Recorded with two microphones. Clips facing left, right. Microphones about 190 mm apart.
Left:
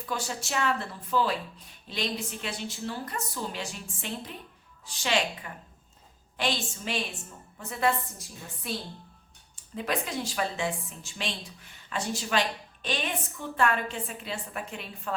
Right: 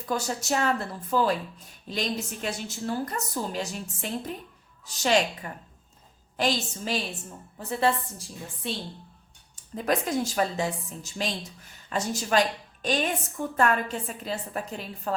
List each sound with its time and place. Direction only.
0.0 s a woman's voice: 40° right (ahead or behind)
9.7 s a woman's voice: 45° right (ahead or behind)